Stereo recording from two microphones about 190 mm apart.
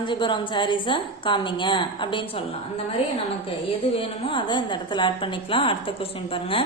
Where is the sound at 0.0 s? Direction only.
25° left (ahead or behind).